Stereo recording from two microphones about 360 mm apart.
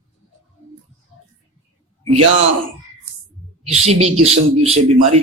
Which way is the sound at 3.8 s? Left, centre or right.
Centre.